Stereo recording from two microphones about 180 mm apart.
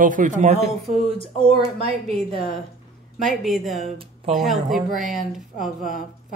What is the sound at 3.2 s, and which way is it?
Speech, centre (ahead or behind).